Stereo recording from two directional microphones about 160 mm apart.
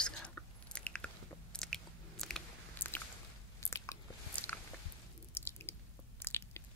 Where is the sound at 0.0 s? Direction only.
5° left (ahead or behind).